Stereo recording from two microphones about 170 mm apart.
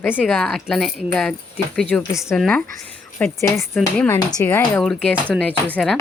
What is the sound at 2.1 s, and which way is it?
Speech, 15° left (ahead or behind).